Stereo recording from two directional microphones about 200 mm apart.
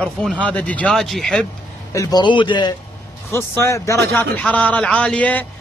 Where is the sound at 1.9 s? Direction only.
15° left (ahead or behind).